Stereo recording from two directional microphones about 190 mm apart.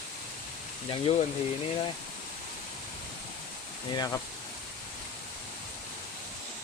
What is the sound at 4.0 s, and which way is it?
Speech, 15° left (ahead or behind).